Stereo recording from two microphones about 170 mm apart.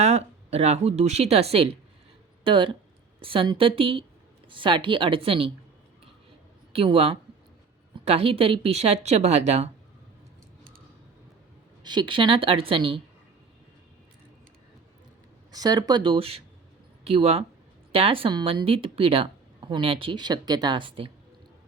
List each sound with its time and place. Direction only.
0.0 s speech: 40° right (ahead or behind)
6.7 s speech: 35° right (ahead or behind)
11.8 s speech: 25° right (ahead or behind)
15.5 s speech: 25° right (ahead or behind)